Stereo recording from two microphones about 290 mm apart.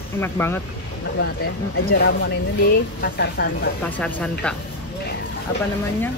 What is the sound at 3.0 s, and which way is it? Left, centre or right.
Speech, left.